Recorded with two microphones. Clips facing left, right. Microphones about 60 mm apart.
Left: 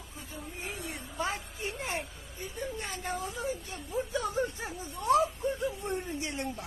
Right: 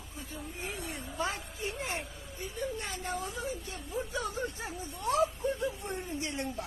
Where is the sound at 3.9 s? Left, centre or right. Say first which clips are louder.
Left 4 dB; left.